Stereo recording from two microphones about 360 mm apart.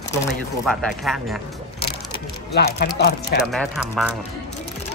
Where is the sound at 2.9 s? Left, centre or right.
Left.